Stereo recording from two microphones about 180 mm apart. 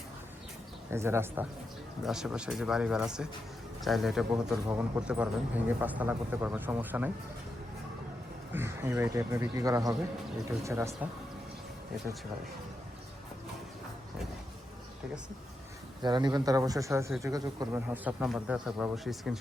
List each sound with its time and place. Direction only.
0.9 s speech: 15° right (ahead or behind)
8.5 s speech: 15° right (ahead or behind)
16.0 s speech: 25° right (ahead or behind); by 19.4 s centre (ahead or behind)